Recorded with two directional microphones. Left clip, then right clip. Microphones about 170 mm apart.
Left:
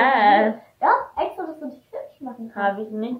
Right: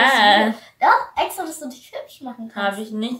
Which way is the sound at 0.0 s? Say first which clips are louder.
Right 2 dB; 15° right (ahead or behind).